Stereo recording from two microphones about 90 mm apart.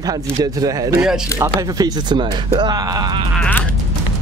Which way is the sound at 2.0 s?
60° right (ahead or behind).